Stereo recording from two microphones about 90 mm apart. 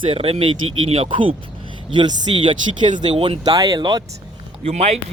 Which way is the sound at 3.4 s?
45° right (ahead or behind).